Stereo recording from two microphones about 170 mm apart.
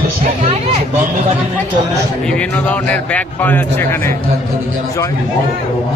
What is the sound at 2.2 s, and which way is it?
Speech, 5° left (ahead or behind).